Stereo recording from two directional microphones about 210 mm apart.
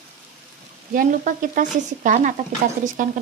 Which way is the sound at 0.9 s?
40° right (ahead or behind).